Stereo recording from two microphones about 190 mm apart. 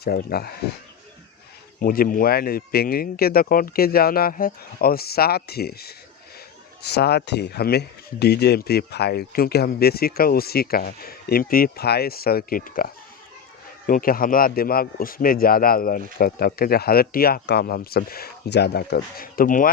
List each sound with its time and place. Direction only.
0.0 s speech: 55° left (ahead or behind)
1.8 s speech: 50° left (ahead or behind)